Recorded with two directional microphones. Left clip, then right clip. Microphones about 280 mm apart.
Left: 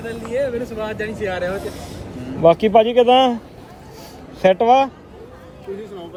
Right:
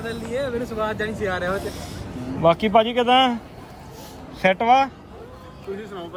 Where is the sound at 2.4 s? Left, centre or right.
Centre.